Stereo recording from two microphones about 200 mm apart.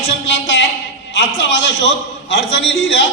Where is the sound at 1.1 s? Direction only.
65° left (ahead or behind).